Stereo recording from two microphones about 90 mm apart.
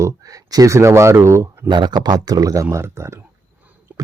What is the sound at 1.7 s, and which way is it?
Speech, 55° right (ahead or behind).